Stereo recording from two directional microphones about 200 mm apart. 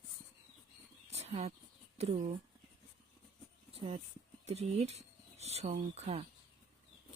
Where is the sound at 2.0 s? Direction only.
30° right (ahead or behind).